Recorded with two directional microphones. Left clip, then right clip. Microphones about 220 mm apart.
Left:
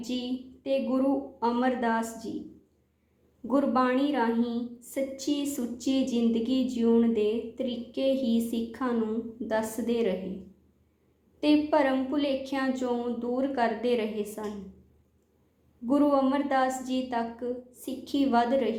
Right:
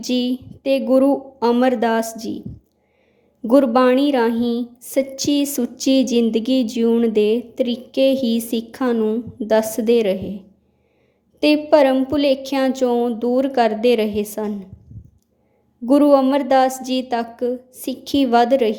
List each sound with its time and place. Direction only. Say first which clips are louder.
0.0 s a woman's voice: right 12 dB; 50° right (ahead or behind)
3.4 s a woman's voice: right 12 dB; 50° right (ahead or behind)
11.3 s a woman's voice: right 10 dB; 50° right (ahead or behind)
15.9 s a woman's voice: right 11 dB; 50° right (ahead or behind)